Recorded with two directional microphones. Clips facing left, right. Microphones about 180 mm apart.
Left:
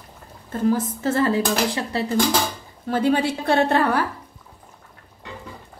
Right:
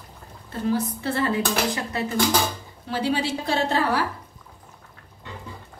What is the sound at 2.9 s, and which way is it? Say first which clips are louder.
A woman's voice: left 5 dB; 50° left (ahead or behind).